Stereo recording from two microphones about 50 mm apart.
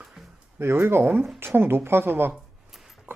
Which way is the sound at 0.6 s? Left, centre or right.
Right.